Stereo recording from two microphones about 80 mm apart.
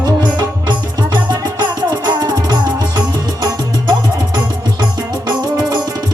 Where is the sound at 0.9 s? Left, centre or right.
Right.